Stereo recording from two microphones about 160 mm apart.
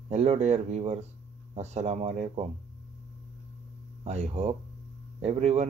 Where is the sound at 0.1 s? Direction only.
45° right (ahead or behind).